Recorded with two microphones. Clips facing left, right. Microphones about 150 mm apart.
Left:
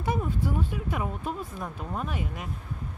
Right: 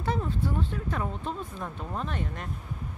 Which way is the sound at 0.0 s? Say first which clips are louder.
Left 1 dB; 10° left (ahead or behind).